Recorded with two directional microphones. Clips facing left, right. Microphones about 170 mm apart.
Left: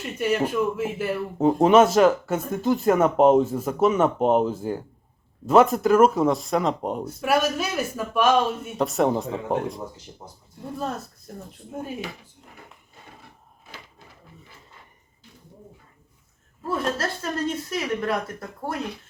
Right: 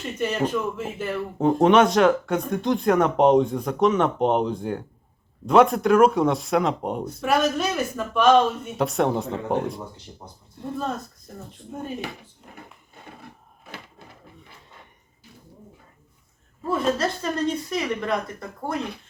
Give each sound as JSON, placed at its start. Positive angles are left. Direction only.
{"t": 0.0, "sound": "speech", "side_deg": 5}
{"t": 16.6, "sound": "speech", "side_deg": 0}